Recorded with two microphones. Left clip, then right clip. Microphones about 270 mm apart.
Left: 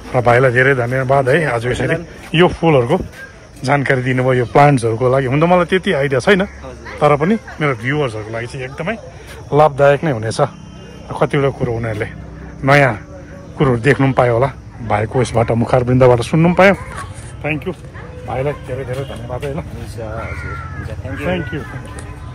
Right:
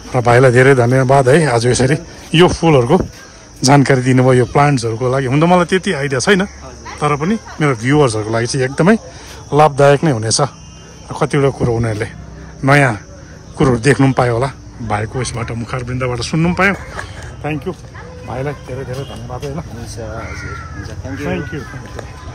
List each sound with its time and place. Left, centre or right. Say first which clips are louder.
0.1 s a man's voice: right 2 dB; centre
9.5 s a man's voice: right 1 dB; centre
18.3 s a man's voice: left 3 dB; centre